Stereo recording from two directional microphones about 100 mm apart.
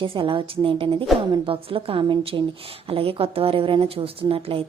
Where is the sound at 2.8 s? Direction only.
70° right (ahead or behind).